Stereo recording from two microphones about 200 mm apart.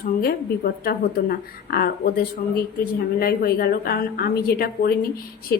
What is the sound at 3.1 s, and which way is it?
A woman's voice, 50° left (ahead or behind).